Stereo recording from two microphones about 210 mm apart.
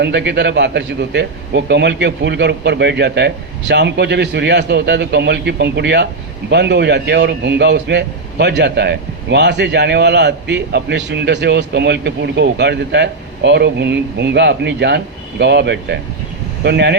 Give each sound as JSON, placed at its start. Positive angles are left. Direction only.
{"t": 0.0, "sound": "a man's voice", "side_deg": -55}